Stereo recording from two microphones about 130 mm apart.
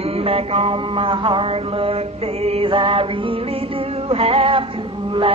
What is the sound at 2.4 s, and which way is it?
Mantra, 45° right (ahead or behind).